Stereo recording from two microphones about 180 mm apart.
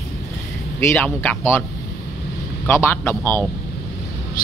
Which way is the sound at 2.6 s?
15° left (ahead or behind).